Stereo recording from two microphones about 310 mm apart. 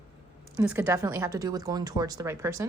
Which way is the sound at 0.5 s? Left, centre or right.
Centre.